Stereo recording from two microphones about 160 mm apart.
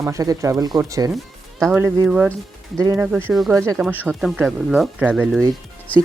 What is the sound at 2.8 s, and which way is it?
Speech, 20° right (ahead or behind).